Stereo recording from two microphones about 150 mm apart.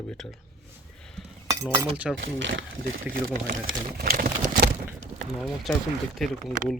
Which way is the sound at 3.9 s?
85° right.